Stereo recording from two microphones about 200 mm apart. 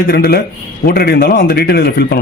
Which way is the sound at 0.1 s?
50° left (ahead or behind).